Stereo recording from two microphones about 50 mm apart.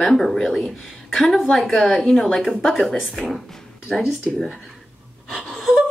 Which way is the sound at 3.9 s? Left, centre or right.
Centre.